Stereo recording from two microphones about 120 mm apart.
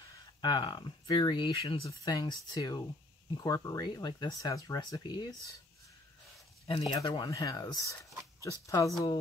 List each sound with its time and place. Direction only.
0.4 s speech: 40° left (ahead or behind)
1.9 s speech: 35° left (ahead or behind)
6.7 s speech: 40° left (ahead or behind); by 8.9 s 25° left (ahead or behind)